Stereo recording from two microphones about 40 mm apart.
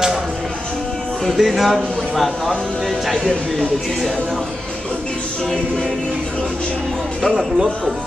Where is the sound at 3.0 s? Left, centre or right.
Centre.